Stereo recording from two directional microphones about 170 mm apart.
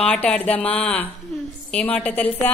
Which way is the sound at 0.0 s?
5° left (ahead or behind).